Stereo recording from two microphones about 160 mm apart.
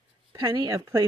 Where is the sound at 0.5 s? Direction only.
20° right (ahead or behind).